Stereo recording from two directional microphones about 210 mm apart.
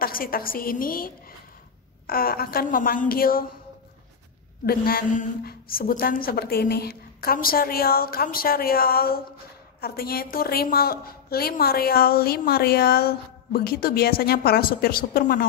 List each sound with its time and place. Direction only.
0.0 s a woman's voice: 45° left (ahead or behind)
4.6 s a woman's voice: 45° left (ahead or behind)